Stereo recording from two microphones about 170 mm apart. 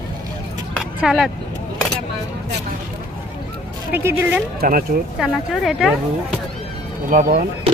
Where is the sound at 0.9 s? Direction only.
5° right (ahead or behind).